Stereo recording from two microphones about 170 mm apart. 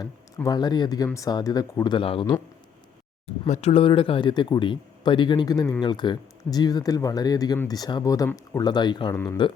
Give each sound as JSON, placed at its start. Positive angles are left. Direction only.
{"t": 0.4, "sound": "speech", "side_deg": 25}
{"t": 3.5, "sound": "speech", "side_deg": 35}
{"t": 9.1, "sound": "speech", "side_deg": 10}